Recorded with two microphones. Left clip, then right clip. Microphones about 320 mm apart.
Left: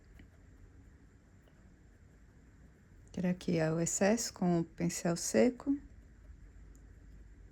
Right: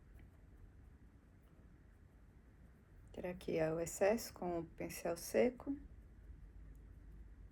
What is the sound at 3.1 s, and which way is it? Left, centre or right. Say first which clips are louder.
Speech: left 5 dB; left.